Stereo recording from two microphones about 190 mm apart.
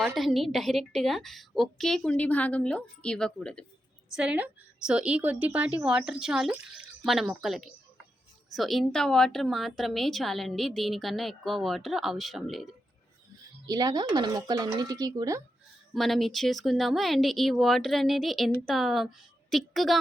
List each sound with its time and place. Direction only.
0.0 s a woman's voice: centre (ahead or behind)
4.1 s a woman's voice: 5° right (ahead or behind)
13.7 s speech: 20° right (ahead or behind)
16.0 s a woman's voice: centre (ahead or behind)